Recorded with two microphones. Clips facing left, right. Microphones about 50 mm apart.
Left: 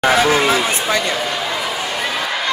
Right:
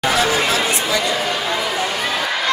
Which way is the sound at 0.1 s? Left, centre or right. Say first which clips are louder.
Left 3 dB; left.